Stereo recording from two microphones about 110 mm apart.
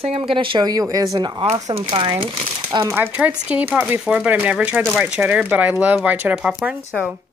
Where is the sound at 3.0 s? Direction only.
15° right (ahead or behind).